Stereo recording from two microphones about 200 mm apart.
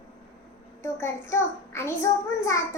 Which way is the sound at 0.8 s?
15° left (ahead or behind).